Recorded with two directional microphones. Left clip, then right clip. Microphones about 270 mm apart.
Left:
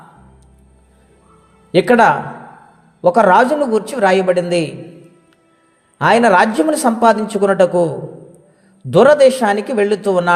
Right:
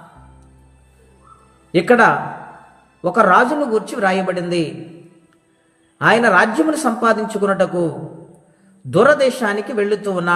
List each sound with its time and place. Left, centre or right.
1.7 s a man's voice: left
6.0 s a man's voice: left